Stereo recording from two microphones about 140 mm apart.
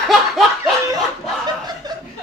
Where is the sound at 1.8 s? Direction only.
30° right (ahead or behind).